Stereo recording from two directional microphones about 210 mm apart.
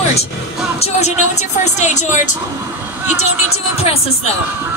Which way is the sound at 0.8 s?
30° left (ahead or behind).